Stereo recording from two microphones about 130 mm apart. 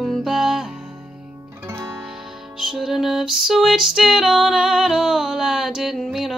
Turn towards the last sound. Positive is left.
turn(degrees=0)  # may be behind; listen again after turning